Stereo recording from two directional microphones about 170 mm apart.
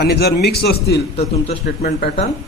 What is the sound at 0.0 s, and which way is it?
A man's voice, 70° left (ahead or behind).